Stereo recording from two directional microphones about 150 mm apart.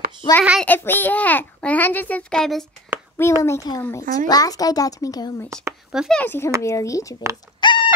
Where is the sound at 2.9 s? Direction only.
15° right (ahead or behind).